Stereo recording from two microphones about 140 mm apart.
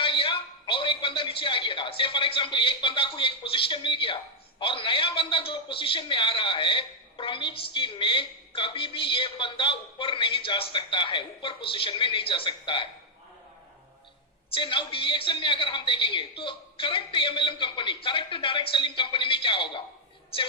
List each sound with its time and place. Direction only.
0.0 s a sound: 40° left (ahead or behind)
4.6 s a man's voice: 35° left (ahead or behind)
14.5 s a man's voice: 35° left (ahead or behind)